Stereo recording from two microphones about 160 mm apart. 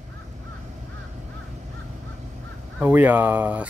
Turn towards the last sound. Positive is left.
turn(degrees=-10)  # may be behind; listen again after turning